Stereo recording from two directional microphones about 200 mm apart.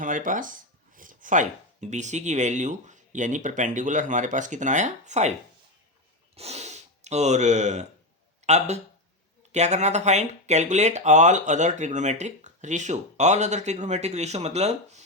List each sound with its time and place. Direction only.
0.0 s speech: 40° right (ahead or behind)
6.3 s speech: 30° right (ahead or behind)